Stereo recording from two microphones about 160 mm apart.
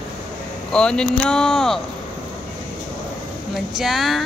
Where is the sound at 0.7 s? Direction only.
5° left (ahead or behind).